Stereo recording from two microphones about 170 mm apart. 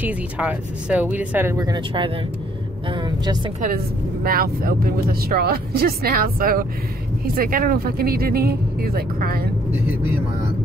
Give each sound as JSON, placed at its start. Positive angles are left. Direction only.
{"t": 0.0, "sound": "a woman's voice", "side_deg": -5}
{"t": 3.6, "sound": "speech", "side_deg": -60}